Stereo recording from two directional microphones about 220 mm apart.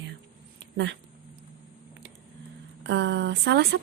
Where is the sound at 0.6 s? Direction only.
50° right (ahead or behind).